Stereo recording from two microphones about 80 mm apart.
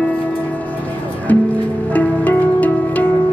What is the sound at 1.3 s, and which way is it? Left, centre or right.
Music, left.